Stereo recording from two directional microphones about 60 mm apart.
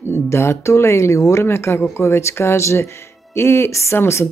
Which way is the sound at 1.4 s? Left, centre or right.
Left.